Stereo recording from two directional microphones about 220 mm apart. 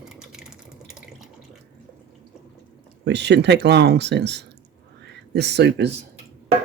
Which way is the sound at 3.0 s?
50° right (ahead or behind).